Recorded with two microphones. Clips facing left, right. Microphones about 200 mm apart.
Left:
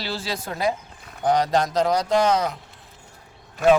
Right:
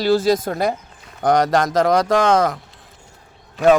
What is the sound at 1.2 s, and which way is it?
Speech, 85° right.